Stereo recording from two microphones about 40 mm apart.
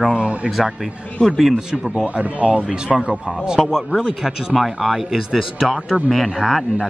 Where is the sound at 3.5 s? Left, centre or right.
Centre.